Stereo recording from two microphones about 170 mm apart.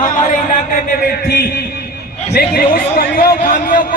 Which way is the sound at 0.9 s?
55° left (ahead or behind).